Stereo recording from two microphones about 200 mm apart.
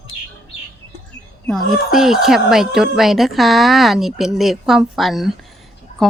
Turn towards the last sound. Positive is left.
turn(degrees=0)  # may be behind; listen again after turning